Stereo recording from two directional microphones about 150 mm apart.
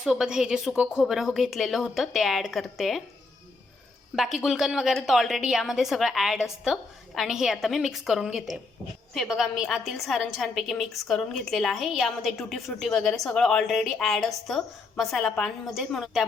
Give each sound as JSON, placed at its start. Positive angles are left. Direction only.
{"t": 0.0, "sound": "a woman's voice", "side_deg": -5}
{"t": 4.1, "sound": "a woman's voice", "side_deg": -5}